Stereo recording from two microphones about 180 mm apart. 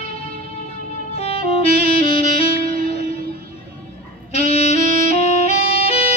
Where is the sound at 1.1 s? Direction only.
35° left (ahead or behind).